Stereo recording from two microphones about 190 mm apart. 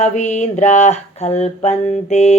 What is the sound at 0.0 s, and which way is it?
Mantra, 40° left (ahead or behind).